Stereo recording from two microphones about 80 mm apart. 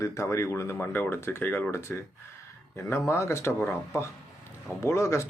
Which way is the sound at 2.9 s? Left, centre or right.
Left.